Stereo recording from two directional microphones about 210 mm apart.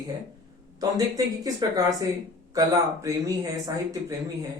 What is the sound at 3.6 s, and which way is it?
Speech, 15° right (ahead or behind).